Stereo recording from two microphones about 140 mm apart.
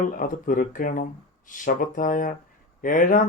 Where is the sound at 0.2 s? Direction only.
75° left (ahead or behind).